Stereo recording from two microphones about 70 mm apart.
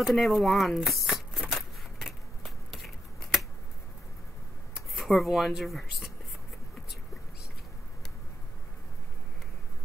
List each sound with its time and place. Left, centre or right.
0.0 s speech: centre
0.7 s a sound: centre
4.7 s speech: centre